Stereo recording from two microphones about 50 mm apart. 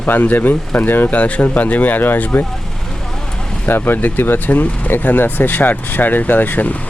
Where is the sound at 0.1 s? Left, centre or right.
Left.